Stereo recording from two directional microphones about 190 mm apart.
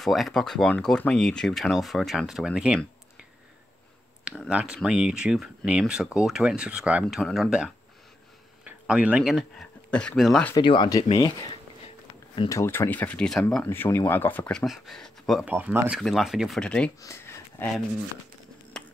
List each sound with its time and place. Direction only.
0.0 s speech: centre (ahead or behind)
4.2 s speech: 5° right (ahead or behind)
10.5 s speech: 25° left (ahead or behind)
12.4 s speech: 15° left (ahead or behind)
15.5 s speech: 10° right (ahead or behind); by 16.9 s 5° left (ahead or behind)
17.0 s a sound: 15° left (ahead or behind)
18.8 s finger snapping: 5° left (ahead or behind)